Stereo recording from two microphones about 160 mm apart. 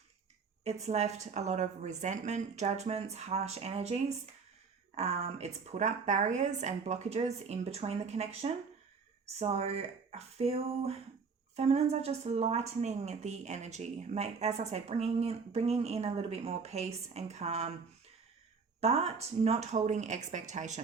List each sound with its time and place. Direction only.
0.6 s a woman's voice: 45° right (ahead or behind)
18.8 s a woman's voice: 40° right (ahead or behind)